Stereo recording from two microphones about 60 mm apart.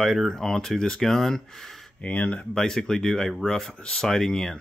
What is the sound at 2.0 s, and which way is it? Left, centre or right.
Speech, left.